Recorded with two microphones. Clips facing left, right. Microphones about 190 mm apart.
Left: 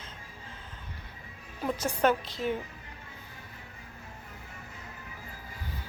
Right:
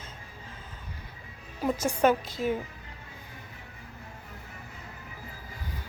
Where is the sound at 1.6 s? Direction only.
10° right (ahead or behind).